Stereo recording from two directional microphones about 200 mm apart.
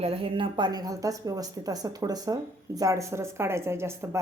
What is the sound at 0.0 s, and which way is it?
A woman's voice, 30° right (ahead or behind).